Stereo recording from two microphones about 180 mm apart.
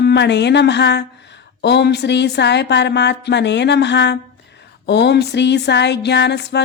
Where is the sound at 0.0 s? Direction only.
70° left (ahead or behind).